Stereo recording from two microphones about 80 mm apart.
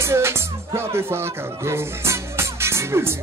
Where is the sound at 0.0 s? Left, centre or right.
Right.